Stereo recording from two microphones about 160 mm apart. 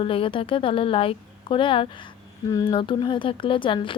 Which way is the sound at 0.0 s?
35° left (ahead or behind).